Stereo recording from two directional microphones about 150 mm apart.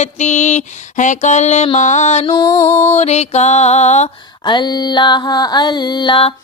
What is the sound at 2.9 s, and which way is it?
Music, 45° left (ahead or behind).